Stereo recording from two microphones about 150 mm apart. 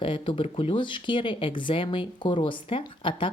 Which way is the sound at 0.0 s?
35° left (ahead or behind).